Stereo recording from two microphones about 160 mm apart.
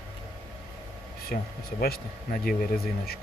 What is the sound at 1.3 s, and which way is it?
Speech, 60° left (ahead or behind).